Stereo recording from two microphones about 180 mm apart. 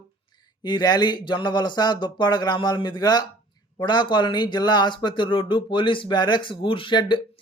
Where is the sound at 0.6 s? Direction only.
25° left (ahead or behind).